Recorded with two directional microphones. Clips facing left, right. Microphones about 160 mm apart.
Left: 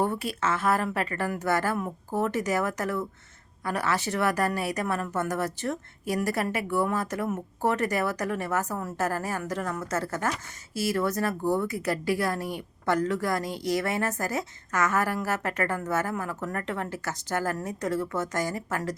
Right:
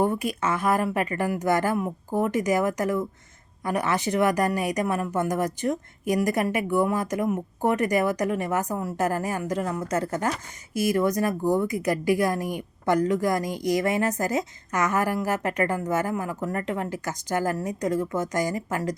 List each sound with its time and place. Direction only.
0.0 s speech: 15° right (ahead or behind)